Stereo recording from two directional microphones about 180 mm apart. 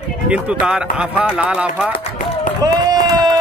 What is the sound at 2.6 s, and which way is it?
Run, 20° right (ahead or behind).